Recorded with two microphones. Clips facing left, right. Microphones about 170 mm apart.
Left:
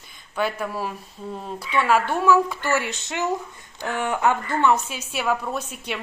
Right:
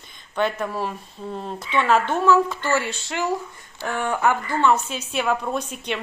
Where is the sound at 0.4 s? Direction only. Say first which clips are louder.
Right 2 dB; 5° left (ahead or behind).